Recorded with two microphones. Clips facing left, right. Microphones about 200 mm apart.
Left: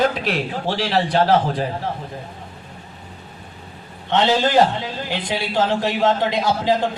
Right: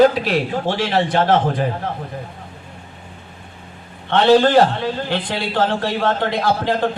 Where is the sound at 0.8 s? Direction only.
50° right (ahead or behind).